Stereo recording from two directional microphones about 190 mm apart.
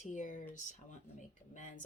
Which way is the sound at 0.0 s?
40° left (ahead or behind).